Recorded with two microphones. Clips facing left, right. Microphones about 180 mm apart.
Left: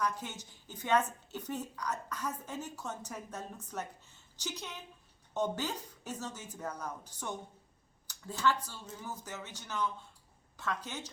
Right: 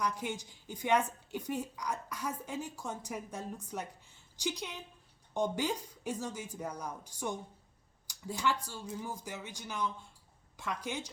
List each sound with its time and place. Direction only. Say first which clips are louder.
0.0 s a woman's voice: right 1 dB; 10° right (ahead or behind)